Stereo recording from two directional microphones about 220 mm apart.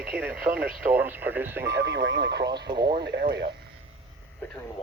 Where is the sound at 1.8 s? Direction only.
55° right (ahead or behind).